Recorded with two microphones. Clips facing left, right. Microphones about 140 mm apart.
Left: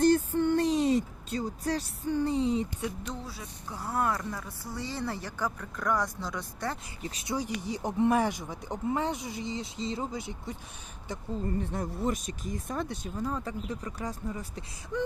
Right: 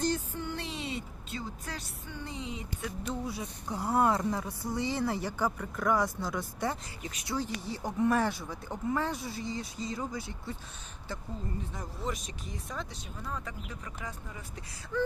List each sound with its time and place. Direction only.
0.0 s a sound: 55° left (ahead or behind); by 2.9 s 35° left (ahead or behind)
3.2 s speech: 20° right (ahead or behind)
7.0 s speech: 35° left (ahead or behind)
7.3 s speech: 15° left (ahead or behind)
11.6 s speech: 60° left (ahead or behind)
13.2 s speech: 30° left (ahead or behind)